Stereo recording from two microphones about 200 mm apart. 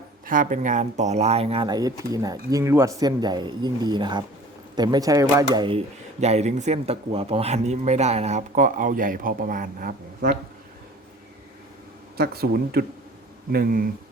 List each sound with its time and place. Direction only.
0.3 s speech: 40° right (ahead or behind)
12.1 s speech: 50° right (ahead or behind)